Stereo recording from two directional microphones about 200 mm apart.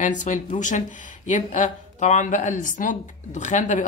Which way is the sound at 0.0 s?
40° left (ahead or behind).